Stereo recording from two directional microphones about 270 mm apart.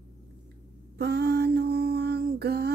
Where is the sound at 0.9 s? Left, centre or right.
Right.